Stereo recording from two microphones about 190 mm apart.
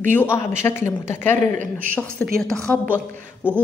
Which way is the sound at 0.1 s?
10° left (ahead or behind).